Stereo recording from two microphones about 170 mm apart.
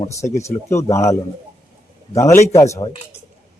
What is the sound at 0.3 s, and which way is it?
Speech, 15° left (ahead or behind).